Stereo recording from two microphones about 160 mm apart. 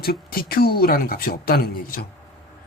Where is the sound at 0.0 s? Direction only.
70° left (ahead or behind).